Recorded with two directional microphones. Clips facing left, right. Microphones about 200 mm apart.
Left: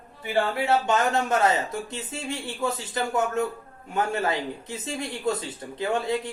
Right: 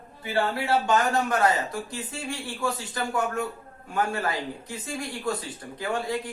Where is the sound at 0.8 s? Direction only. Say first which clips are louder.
Even; 25° left (ahead or behind).